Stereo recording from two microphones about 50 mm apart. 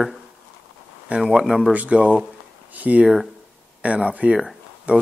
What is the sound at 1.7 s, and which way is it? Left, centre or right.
Speech, right.